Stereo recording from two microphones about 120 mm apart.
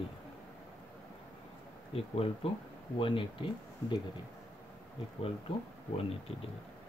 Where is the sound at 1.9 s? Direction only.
50° left (ahead or behind).